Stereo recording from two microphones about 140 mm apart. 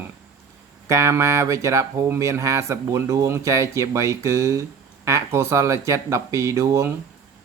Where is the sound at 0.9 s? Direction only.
20° right (ahead or behind).